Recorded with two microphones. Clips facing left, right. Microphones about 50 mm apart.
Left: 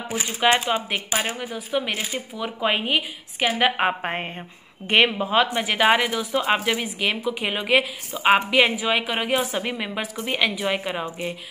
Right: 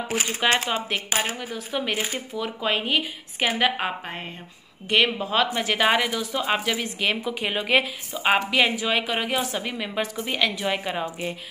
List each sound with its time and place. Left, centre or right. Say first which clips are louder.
0.4 s a woman's voice: left 4 dB; centre
3.6 s a woman's voice: left 5 dB; left
4.0 s a woman's voice: left 6 dB; left
5.1 s a woman's voice: left 3 dB; centre
7.0 s a woman's voice: left 1 dB; centre